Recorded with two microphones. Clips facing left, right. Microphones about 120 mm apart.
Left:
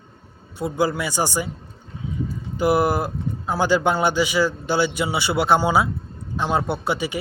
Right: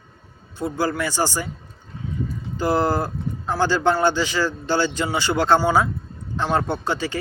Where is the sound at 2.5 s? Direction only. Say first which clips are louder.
Left 1 dB; 15° left (ahead or behind).